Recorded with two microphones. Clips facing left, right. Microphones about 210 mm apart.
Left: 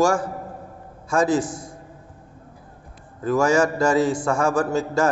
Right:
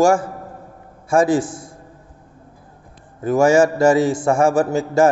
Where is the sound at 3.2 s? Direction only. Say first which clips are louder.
Right 5 dB; 25° right (ahead or behind).